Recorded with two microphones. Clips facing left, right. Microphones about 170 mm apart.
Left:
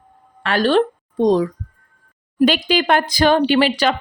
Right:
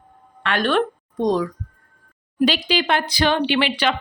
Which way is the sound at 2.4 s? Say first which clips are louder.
Left 4 dB; 50° left (ahead or behind).